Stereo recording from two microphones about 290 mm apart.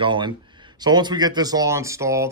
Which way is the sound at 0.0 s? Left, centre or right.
Centre.